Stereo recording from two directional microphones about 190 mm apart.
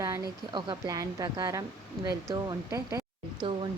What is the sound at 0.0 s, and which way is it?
Speech, 20° right (ahead or behind).